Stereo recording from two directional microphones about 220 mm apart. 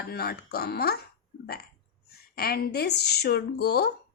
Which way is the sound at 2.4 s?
45° left (ahead or behind).